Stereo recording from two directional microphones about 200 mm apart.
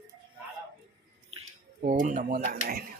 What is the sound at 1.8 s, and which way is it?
Speech, 40° right (ahead or behind).